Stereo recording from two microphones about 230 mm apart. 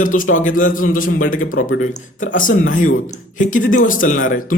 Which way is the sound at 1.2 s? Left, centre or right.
Left.